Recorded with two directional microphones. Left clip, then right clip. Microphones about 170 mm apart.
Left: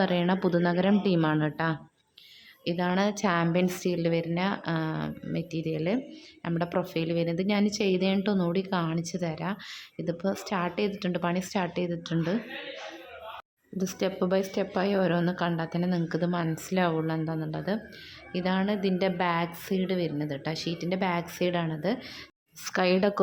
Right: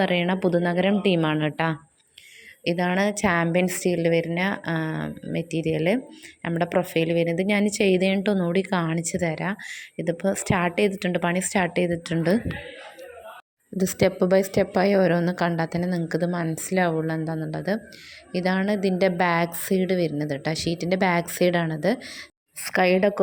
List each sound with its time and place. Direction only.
0.0 s a woman's voice: 5° right (ahead or behind)
8.5 s a woman's voice: 15° right (ahead or behind)
13.7 s a woman's voice: 25° right (ahead or behind); by 23.2 s 10° right (ahead or behind)